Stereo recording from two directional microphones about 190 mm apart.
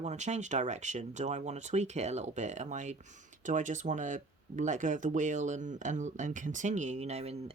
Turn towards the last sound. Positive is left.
turn(degrees=-35)  # may be behind; listen again after turning